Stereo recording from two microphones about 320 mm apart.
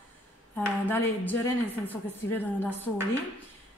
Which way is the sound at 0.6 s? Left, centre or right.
Centre.